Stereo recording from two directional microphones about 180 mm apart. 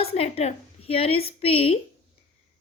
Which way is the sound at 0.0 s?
35° left (ahead or behind).